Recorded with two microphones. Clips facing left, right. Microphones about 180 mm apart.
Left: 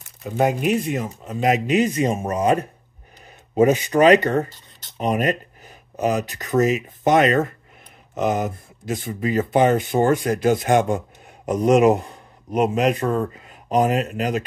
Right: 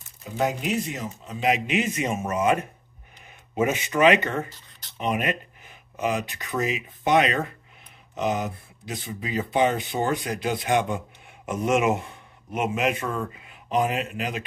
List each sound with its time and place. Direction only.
0.2 s speech: 55° left (ahead or behind); by 14.4 s 40° left (ahead or behind)